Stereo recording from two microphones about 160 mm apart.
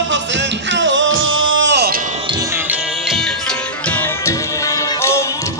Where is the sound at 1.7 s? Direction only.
80° right.